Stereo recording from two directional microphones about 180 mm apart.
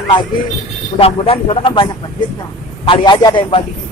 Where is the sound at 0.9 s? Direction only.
30° left (ahead or behind).